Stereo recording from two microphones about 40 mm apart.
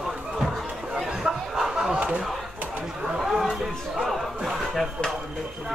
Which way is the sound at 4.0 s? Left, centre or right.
Centre.